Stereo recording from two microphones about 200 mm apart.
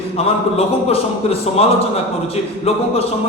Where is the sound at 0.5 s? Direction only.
30° left (ahead or behind).